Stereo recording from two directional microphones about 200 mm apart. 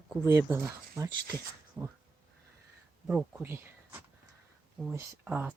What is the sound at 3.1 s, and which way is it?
Speech, 10° right (ahead or behind).